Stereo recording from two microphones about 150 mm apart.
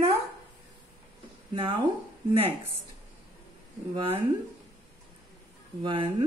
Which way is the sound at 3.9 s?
35° right (ahead or behind).